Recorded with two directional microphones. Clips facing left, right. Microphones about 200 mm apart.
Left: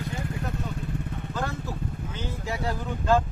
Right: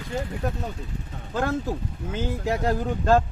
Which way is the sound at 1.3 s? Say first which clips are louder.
Right 8 dB; 55° right (ahead or behind).